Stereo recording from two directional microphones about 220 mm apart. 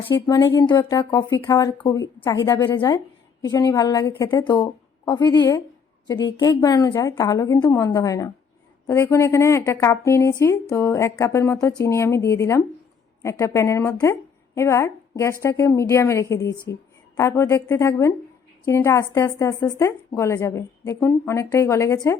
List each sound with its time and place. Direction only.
0.0 s a woman's voice: 20° left (ahead or behind)